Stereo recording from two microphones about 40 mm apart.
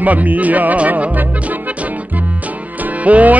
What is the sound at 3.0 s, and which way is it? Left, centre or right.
Music, right.